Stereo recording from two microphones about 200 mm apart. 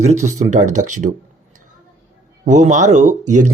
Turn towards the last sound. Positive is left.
turn(degrees=-35)  # may be behind; listen again after turning